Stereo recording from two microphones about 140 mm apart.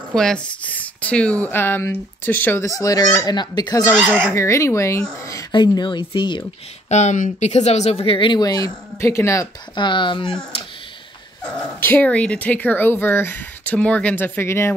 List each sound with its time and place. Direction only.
0.1 s speech: 5° left (ahead or behind); by 6.4 s 35° left (ahead or behind)
6.9 s speech: 55° left (ahead or behind); by 9.5 s 20° left (ahead or behind)
9.8 s speech: 35° left (ahead or behind)
11.8 s speech: 10° left (ahead or behind)